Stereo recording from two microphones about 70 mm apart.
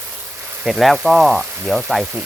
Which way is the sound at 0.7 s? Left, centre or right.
Centre.